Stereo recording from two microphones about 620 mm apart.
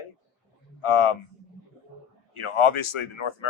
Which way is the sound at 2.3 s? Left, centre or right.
Left.